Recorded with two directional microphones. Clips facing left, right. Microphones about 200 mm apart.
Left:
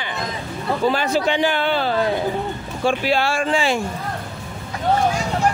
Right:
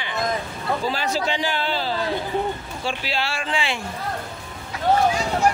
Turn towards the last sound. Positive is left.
turn(degrees=45)  # may be behind; listen again after turning